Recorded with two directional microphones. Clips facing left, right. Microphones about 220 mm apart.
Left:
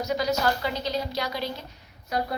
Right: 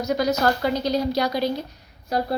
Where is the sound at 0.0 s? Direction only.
40° right (ahead or behind).